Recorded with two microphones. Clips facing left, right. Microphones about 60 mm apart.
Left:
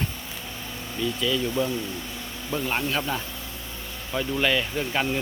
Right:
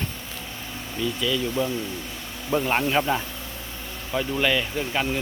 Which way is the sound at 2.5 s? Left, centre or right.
Right.